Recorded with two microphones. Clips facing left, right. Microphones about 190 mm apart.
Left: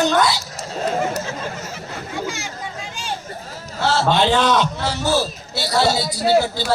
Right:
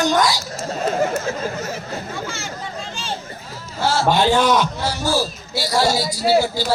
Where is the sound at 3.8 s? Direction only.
10° right (ahead or behind).